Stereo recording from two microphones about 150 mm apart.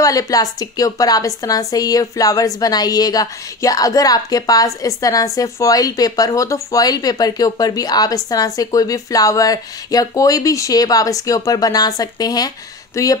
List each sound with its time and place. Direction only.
0.0 s a woman's voice: 25° left (ahead or behind)